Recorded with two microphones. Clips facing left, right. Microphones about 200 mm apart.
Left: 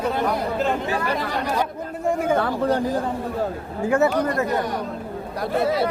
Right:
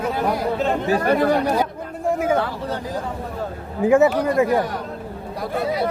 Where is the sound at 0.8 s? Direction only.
40° right (ahead or behind).